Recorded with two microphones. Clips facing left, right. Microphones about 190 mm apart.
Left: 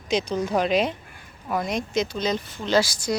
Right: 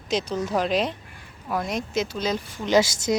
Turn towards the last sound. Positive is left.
turn(degrees=-20)  # may be behind; listen again after turning